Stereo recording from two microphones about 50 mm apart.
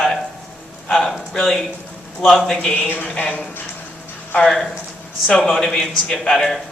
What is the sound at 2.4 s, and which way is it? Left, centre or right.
Speech, centre.